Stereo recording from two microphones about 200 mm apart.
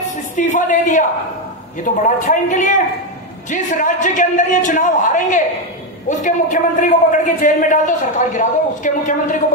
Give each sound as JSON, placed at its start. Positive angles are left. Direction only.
{"t": 0.4, "sound": "a man's voice", "side_deg": 40}
{"t": 2.0, "sound": "a man's voice", "side_deg": 40}